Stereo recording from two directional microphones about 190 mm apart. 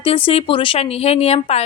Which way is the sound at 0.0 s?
30° left (ahead or behind).